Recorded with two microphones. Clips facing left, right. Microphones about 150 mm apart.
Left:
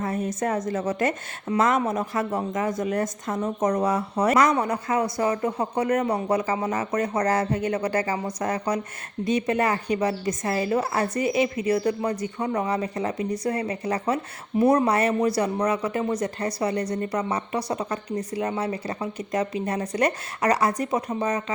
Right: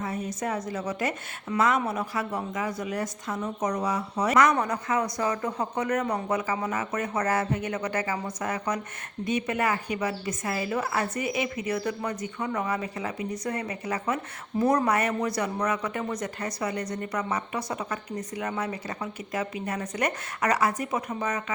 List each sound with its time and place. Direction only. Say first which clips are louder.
0.0 s a woman's voice: left 5 dB; 55° left (ahead or behind)
4.6 s speech: left 3 dB; 30° left (ahead or behind)